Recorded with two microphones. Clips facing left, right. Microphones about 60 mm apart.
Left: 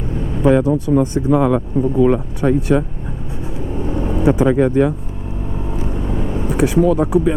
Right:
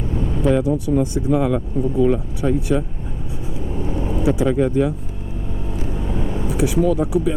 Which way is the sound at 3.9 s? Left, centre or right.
Left.